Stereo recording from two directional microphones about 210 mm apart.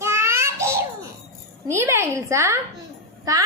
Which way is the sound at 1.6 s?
15° right (ahead or behind).